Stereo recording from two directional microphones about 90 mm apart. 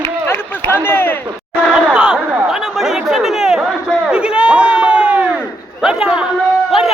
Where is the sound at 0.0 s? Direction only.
25° left (ahead or behind).